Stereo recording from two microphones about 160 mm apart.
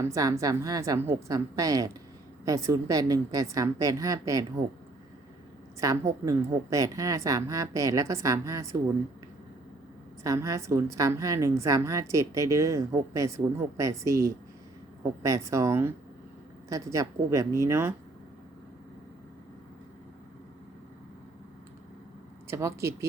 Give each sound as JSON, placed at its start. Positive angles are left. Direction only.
{"t": 0.0, "sound": "a woman's voice", "side_deg": -20}
{"t": 5.8, "sound": "a woman's voice", "side_deg": -20}
{"t": 10.2, "sound": "a woman's voice", "side_deg": -20}
{"t": 22.4, "sound": "speech", "side_deg": -15}